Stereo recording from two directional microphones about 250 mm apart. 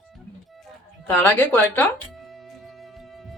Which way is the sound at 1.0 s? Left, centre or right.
Centre.